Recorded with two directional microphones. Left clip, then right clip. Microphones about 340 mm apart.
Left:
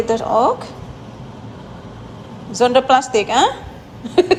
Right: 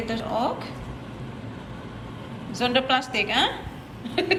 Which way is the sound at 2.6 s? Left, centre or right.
Centre.